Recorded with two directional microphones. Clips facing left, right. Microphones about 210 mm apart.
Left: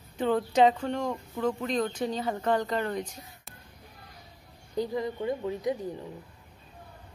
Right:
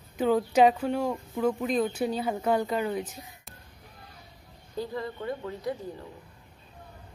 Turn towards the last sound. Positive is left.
turn(degrees=15)  # may be behind; listen again after turning